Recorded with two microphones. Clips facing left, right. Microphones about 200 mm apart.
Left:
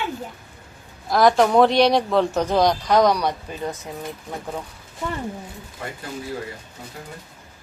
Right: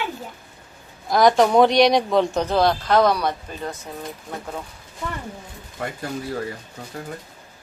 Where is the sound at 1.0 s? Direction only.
Centre (ahead or behind).